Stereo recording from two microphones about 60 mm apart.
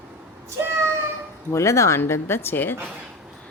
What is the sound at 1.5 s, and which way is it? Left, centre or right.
Speech, left.